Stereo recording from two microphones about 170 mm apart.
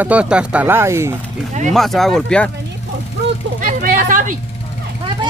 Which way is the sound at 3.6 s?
50° right (ahead or behind).